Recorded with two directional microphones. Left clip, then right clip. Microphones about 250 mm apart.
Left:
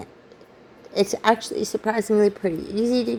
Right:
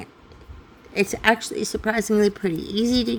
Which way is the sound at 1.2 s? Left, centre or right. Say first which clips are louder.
Right 2 dB; centre.